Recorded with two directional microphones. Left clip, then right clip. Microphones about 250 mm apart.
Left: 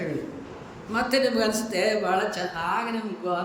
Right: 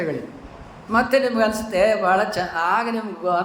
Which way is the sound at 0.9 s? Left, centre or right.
Centre.